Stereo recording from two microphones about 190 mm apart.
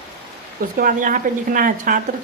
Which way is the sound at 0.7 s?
45° right (ahead or behind).